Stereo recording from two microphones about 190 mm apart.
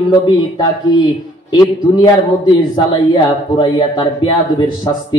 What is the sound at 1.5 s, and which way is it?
A man's voice, 20° left (ahead or behind).